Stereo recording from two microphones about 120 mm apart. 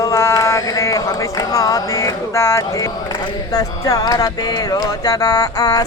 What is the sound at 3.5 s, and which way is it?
Music, 30° left (ahead or behind).